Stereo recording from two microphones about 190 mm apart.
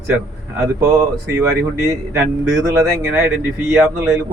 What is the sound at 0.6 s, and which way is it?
Speech, 15° right (ahead or behind).